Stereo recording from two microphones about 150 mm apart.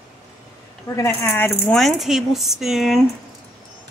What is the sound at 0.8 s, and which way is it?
Speech, 20° left (ahead or behind).